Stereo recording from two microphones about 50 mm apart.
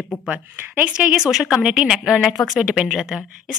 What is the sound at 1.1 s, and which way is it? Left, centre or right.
A woman's voice, centre.